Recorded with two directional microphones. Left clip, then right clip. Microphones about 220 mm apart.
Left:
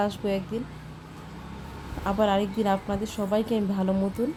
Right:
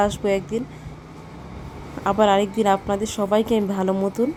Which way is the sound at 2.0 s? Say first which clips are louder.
Right 7 dB; 20° right (ahead or behind).